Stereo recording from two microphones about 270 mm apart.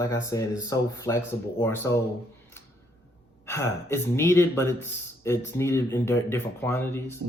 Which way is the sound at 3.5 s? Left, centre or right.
Centre.